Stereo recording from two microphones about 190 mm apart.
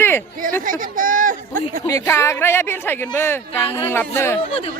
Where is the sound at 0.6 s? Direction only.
45° right (ahead or behind).